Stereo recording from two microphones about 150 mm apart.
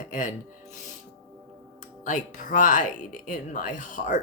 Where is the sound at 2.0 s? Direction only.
60° left (ahead or behind).